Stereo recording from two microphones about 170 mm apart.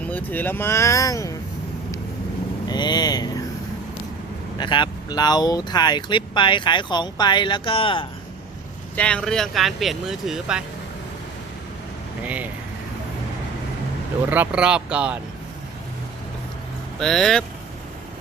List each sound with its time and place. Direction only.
0.0 s speech: 10° left (ahead or behind)
2.6 s speech: 25° left (ahead or behind)
4.5 s speech: 25° left (ahead or behind)
9.0 s speech: 5° left (ahead or behind)
12.2 s speech: 10° right (ahead or behind)
14.3 s speech: 10° right (ahead or behind)
17.0 s speech: centre (ahead or behind)